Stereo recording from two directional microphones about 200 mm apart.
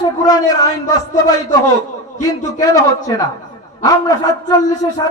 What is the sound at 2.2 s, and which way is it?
A man's voice, 15° left (ahead or behind).